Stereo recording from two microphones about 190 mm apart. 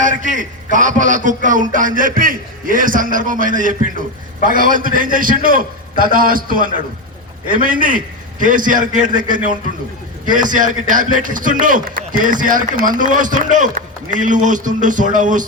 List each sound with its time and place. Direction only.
0.0 s a man's voice: 45° right (ahead or behind)